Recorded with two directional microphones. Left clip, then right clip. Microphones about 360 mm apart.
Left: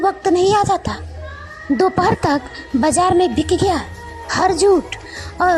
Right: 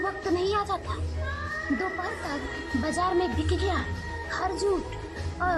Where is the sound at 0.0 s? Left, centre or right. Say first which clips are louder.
Left 13 dB; centre.